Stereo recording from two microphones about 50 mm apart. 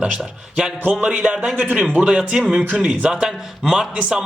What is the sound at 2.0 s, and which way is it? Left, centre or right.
Speech, centre.